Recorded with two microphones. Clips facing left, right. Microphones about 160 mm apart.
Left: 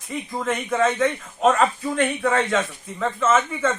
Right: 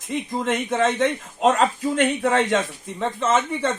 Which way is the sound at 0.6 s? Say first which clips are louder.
Left 2 dB; 25° right (ahead or behind).